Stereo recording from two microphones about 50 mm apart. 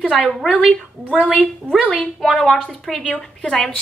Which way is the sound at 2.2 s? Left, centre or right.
Centre.